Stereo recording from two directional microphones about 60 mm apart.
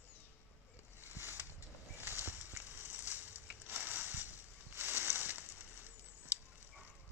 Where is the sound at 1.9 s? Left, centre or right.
Right.